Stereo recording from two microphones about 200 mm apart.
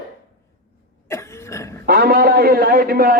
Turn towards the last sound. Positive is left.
turn(degrees=-50)  # may be behind; listen again after turning